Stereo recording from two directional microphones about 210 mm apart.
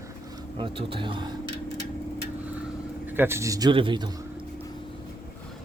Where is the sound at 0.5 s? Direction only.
25° right (ahead or behind).